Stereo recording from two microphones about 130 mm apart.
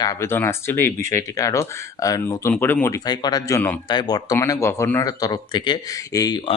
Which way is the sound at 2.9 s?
30° left (ahead or behind).